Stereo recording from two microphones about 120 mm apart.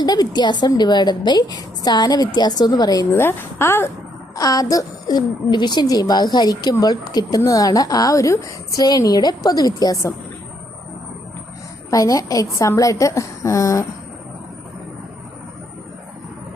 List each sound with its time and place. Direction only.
0.0 s a woman's voice: 35° left (ahead or behind)
3.2 s a woman's voice: 20° left (ahead or behind)
4.4 s a woman's voice: 30° left (ahead or behind)
11.9 s a woman's voice: 30° left (ahead or behind)